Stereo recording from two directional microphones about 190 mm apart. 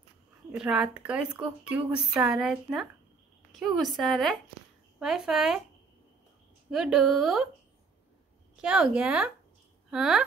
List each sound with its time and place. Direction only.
0.5 s speech: 5° right (ahead or behind)
6.7 s speech: 5° right (ahead or behind)
8.5 s speech: 5° right (ahead or behind)